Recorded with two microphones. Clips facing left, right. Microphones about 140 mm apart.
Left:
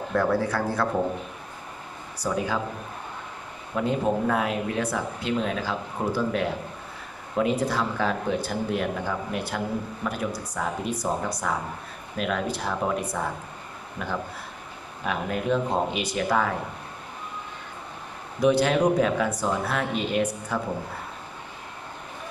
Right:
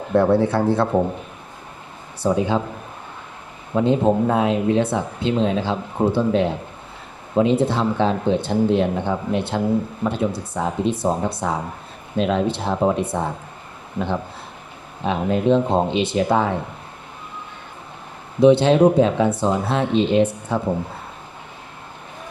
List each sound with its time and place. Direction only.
0.1 s speech: 25° right (ahead or behind)
2.1 s speech: 25° right (ahead or behind)
3.8 s speech: 25° right (ahead or behind)
15.0 s speech: 25° right (ahead or behind)
18.3 s speech: 25° right (ahead or behind)